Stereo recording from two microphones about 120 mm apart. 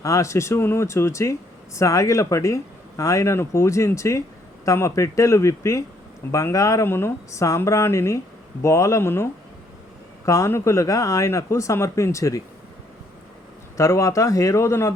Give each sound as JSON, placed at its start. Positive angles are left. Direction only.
{"t": 0.0, "sound": "speech", "side_deg": 25}
{"t": 13.7, "sound": "speech", "side_deg": 25}